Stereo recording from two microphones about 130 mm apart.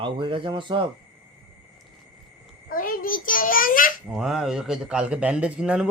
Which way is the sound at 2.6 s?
90° left.